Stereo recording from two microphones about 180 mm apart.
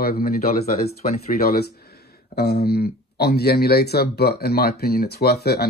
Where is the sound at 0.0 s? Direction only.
55° left (ahead or behind).